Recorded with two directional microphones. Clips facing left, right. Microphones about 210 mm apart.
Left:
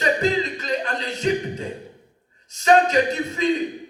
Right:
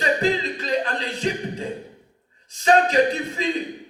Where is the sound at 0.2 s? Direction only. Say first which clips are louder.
Left 1 dB; 30° right (ahead or behind).